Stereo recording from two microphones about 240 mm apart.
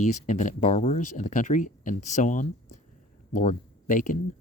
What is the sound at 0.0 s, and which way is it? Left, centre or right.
Speech, left.